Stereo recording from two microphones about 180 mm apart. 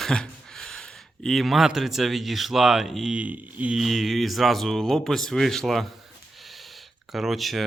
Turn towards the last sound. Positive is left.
turn(degrees=0)  # may be behind; listen again after turning